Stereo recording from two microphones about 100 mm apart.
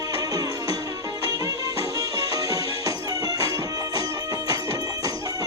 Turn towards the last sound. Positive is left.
turn(degrees=-35)  # may be behind; listen again after turning